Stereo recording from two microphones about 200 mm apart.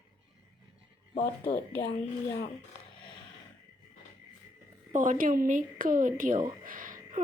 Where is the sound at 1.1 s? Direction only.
55° left (ahead or behind).